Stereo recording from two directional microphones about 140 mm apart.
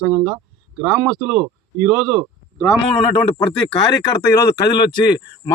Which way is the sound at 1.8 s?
15° right (ahead or behind).